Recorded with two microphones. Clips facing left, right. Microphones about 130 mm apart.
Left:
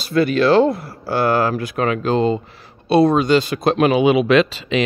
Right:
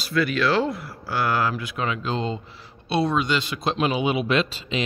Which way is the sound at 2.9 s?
45° left (ahead or behind).